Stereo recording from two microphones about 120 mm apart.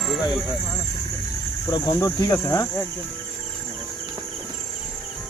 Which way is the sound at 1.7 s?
35° left (ahead or behind).